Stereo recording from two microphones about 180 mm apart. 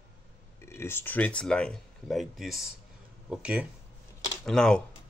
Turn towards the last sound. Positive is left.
turn(degrees=5)  # may be behind; listen again after turning